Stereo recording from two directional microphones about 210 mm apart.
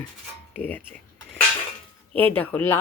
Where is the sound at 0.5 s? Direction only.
10° left (ahead or behind).